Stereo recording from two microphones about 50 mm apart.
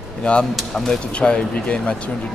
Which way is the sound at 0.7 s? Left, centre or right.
Centre.